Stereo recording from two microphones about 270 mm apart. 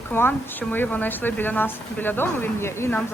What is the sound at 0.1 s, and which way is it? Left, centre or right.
A woman's voice, centre.